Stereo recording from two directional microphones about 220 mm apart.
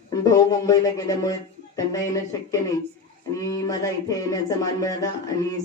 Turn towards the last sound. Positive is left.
turn(degrees=15)  # may be behind; listen again after turning